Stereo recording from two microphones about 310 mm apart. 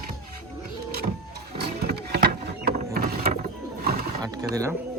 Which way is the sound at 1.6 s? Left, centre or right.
Right.